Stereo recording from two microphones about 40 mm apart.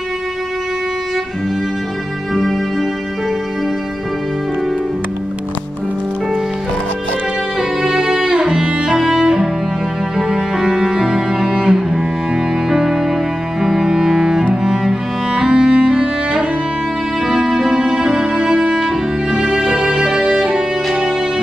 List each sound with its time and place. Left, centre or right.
7.8 s music: right
8.9 s music: centre
10.1 s cello: centre
13.6 s music: centre
13.8 s cello: centre
14.5 s music: centre